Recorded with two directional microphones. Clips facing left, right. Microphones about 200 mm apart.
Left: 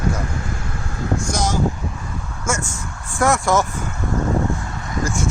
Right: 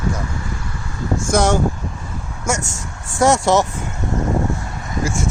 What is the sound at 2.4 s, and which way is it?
Speech, 80° right.